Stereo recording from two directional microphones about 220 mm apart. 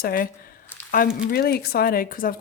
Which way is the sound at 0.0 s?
40° left (ahead or behind).